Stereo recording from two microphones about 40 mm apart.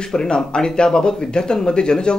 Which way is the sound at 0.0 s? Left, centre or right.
Centre.